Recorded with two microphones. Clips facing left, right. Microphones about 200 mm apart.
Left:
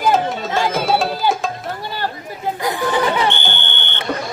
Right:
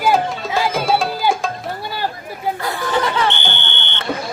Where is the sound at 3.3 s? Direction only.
50° left (ahead or behind).